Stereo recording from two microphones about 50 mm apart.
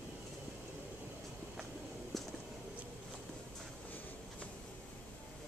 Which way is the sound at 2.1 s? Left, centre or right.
Centre.